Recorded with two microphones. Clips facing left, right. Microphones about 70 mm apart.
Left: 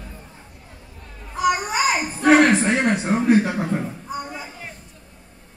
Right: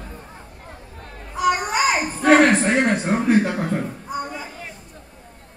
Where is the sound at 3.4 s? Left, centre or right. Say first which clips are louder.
Right 1 dB; centre.